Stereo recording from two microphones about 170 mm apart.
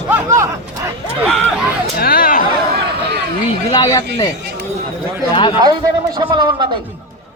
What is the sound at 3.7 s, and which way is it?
Speech, 20° left (ahead or behind).